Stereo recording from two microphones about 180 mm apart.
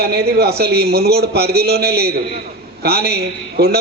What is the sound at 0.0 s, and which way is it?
A man's voice, 60° right (ahead or behind).